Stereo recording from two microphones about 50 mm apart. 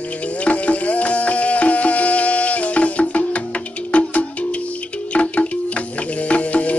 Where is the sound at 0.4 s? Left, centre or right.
Left.